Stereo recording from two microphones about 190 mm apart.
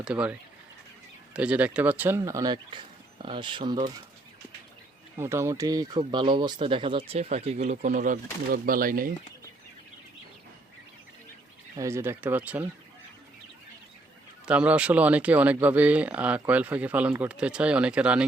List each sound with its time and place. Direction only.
0.0 s speech: 5° right (ahead or behind); by 3.8 s 25° right (ahead or behind)
5.1 s speech: 15° right (ahead or behind); by 9.1 s 45° right (ahead or behind)
11.8 s speech: 15° right (ahead or behind)
14.4 s speech: 5° right (ahead or behind)